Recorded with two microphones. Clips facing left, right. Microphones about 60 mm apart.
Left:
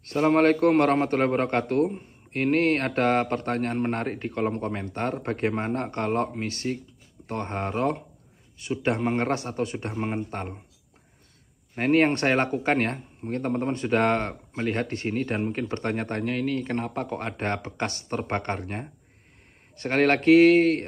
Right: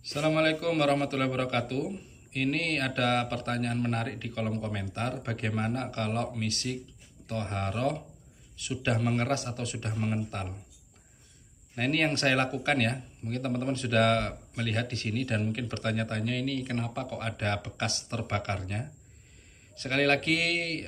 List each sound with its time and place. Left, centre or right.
0.0 s a man's voice: left
11.7 s speech: left